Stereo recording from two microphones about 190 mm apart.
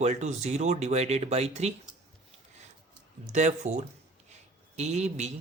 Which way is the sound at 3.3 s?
40° right (ahead or behind).